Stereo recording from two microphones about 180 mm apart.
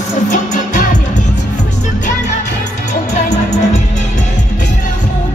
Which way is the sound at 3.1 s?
40° left (ahead or behind).